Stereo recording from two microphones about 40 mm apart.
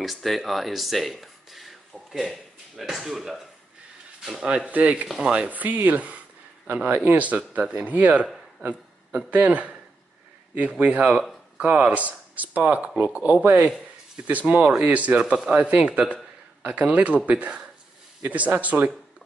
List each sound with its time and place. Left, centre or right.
0.0 s speech: centre
4.6 s speech: right
5.2 s speech: right
5.5 s a man's voice: right
15.1 s speech: right
15.5 s speech: right